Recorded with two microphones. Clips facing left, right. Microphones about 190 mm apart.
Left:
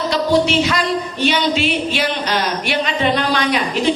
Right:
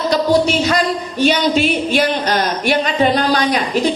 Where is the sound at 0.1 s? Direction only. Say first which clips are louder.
Right 2 dB; 45° right (ahead or behind).